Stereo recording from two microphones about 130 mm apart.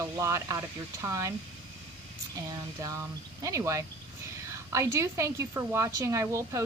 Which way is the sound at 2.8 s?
25° right (ahead or behind).